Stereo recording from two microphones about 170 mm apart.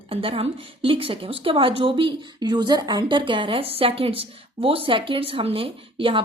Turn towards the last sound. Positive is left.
turn(degrees=-30)  # may be behind; listen again after turning